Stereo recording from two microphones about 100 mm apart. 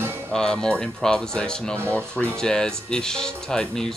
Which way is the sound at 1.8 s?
25° right (ahead or behind).